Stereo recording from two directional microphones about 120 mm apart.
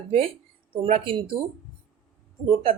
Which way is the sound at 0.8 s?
50° right (ahead or behind).